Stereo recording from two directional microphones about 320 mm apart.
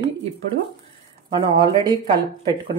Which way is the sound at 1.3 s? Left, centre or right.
Centre.